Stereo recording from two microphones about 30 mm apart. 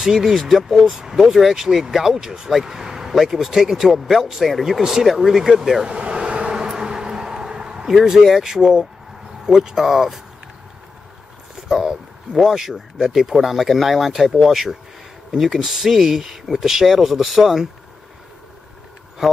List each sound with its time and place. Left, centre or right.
0.0 s speech: centre
0.4 s speech: centre
5.9 s vehicle: right
8.2 s speech: centre
9.5 s speech: centre
12.4 s speech: centre